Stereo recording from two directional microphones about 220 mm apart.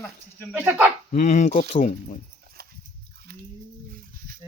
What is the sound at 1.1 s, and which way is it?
Speech, 35° left (ahead or behind).